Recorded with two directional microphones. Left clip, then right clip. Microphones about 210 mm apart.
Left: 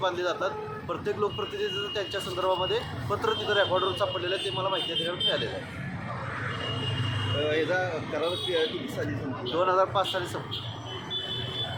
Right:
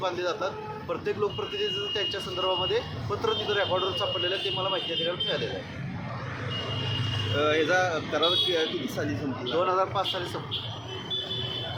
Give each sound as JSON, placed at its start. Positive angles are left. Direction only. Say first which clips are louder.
{"t": 0.0, "sound": "speech", "louder": "left 1 dB", "side_deg": 0}
{"t": 7.4, "sound": "speech", "louder": "right 4 dB", "side_deg": -50}
{"t": 9.6, "sound": "speech", "louder": "left 2 dB", "side_deg": 5}